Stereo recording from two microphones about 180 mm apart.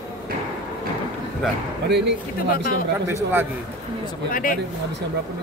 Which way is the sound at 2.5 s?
55° left (ahead or behind).